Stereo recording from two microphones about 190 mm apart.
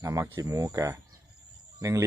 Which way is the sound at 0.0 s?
20° right (ahead or behind).